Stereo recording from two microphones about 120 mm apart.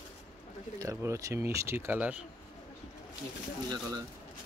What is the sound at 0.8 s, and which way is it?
Speech, 25° right (ahead or behind).